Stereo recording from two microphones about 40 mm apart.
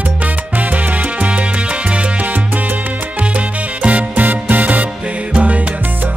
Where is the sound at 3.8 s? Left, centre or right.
Right.